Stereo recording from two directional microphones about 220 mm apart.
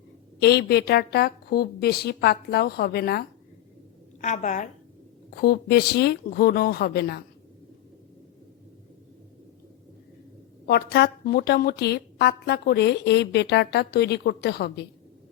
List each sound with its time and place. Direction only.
0.3 s a woman's voice: 50° left (ahead or behind)
4.2 s a woman's voice: 35° left (ahead or behind)
5.3 s a woman's voice: 45° left (ahead or behind)
10.7 s a woman's voice: 45° left (ahead or behind)